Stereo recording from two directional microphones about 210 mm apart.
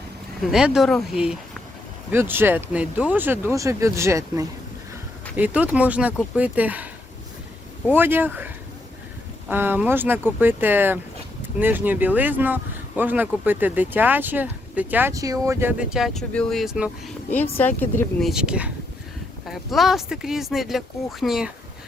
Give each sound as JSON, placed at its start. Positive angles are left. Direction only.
{"t": 0.4, "sound": "speech", "side_deg": -5}
{"t": 7.9, "sound": "speech", "side_deg": -10}
{"t": 17.6, "sound": "speech", "side_deg": 10}
{"t": 18.2, "sound": "speech", "side_deg": 0}